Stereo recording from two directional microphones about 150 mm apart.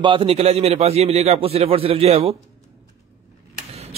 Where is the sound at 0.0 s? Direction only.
35° right (ahead or behind).